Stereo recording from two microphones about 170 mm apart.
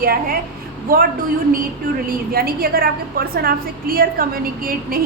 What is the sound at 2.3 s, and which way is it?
A woman's voice, 60° right (ahead or behind).